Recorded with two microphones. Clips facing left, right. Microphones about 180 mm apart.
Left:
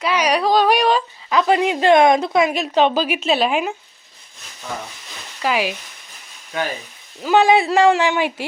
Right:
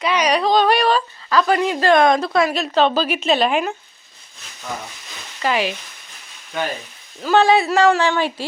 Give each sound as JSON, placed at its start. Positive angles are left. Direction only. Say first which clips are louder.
{"t": 0.0, "sound": "speech", "louder": "even", "side_deg": 5}
{"t": 5.4, "sound": "speech", "louder": "even", "side_deg": 5}
{"t": 7.2, "sound": "speech", "louder": "even", "side_deg": 15}
{"t": 7.6, "sound": "a woman's voice", "louder": "left 1 dB", "side_deg": 25}